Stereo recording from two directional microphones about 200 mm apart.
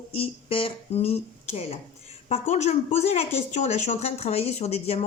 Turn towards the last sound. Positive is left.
turn(degrees=30)  # may be behind; listen again after turning